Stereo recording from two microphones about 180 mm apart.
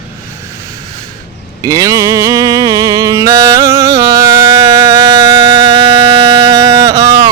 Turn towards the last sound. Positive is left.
turn(degrees=-20)  # may be behind; listen again after turning